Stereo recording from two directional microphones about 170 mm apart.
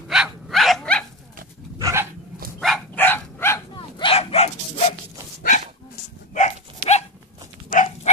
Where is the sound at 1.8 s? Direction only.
15° right (ahead or behind).